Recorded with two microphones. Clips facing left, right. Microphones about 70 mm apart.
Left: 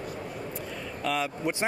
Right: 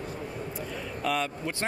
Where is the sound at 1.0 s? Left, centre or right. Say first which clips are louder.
Even; centre.